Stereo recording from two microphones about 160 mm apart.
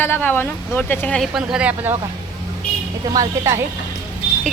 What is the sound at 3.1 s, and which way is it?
Speech, 20° right (ahead or behind).